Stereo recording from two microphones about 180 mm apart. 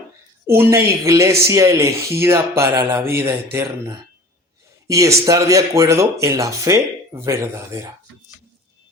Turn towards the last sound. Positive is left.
turn(degrees=-15)  # may be behind; listen again after turning